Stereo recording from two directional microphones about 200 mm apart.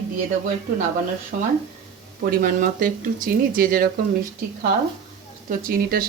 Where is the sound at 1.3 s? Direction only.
50° right (ahead or behind).